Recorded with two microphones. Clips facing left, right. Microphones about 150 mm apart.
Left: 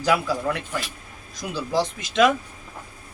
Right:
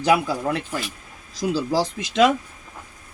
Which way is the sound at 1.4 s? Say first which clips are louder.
Right 4 dB; 35° right (ahead or behind).